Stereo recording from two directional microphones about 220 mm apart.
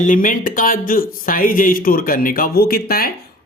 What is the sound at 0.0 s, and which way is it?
Speech, 35° left (ahead or behind).